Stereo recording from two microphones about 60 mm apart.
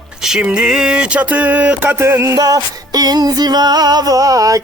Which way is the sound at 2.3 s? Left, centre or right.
Right.